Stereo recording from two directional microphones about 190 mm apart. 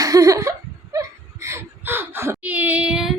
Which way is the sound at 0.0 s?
20° right (ahead or behind).